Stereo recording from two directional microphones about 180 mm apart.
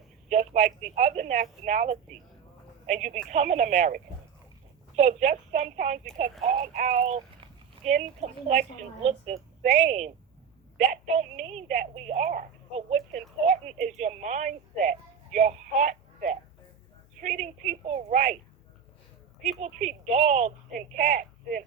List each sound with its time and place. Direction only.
0.3 s a woman's voice: 40° right (ahead or behind)
19.4 s a woman's voice: 40° right (ahead or behind)